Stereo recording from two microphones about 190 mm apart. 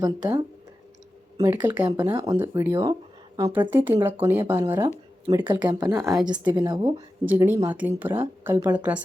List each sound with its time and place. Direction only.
0.0 s speech: 20° right (ahead or behind)
7.3 s speech: 10° right (ahead or behind)